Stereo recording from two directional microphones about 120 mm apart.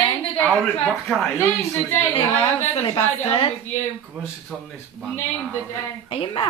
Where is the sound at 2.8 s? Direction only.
50° left (ahead or behind).